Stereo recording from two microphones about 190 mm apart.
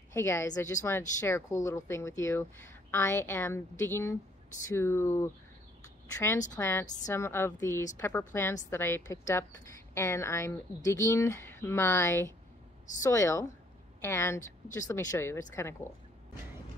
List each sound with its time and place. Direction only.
0.1 s a woman's voice: 15° left (ahead or behind)